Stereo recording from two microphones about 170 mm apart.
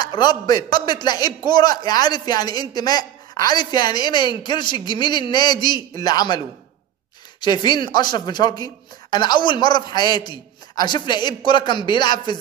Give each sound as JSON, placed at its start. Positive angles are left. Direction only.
{"t": 0.0, "sound": "a man's voice", "side_deg": 25}